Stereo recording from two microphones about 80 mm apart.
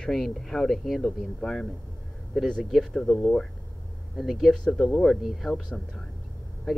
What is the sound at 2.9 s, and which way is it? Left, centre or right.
Speech, centre.